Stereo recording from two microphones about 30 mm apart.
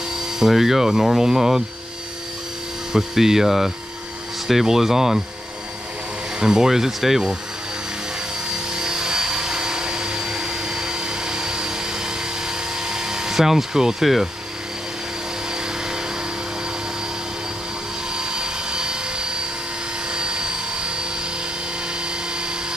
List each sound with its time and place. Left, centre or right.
0.1 s speech: centre
2.9 s speech: centre
6.4 s speech: right
8.5 s helicopter: right
12.4 s a sound: right
18.1 s helicopter: right